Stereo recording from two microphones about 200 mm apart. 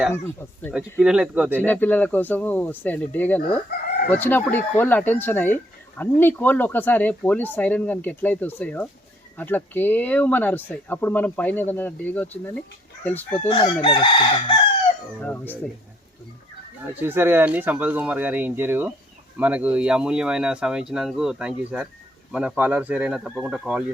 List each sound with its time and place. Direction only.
0.1 s speech: 10° left (ahead or behind)
0.7 s speech: 5° right (ahead or behind)
1.5 s speech: 10° left (ahead or behind)
13.5 s chicken: 25° left (ahead or behind)
15.2 s speech: 5° left (ahead or behind)
16.8 s speech: 10° right (ahead or behind)